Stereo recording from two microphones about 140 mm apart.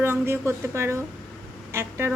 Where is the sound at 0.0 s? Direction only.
15° right (ahead or behind).